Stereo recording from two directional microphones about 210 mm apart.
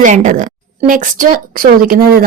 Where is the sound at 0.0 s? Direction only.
35° right (ahead or behind).